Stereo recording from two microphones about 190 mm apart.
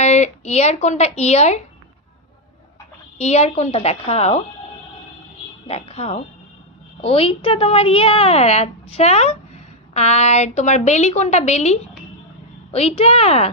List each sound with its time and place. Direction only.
0.0 s a woman's voice: 35° left (ahead or behind)
3.2 s a woman's voice: 35° left (ahead or behind)
5.6 s a woman's voice: 30° left (ahead or behind)